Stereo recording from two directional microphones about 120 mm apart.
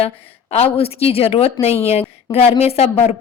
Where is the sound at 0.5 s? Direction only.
55° left (ahead or behind).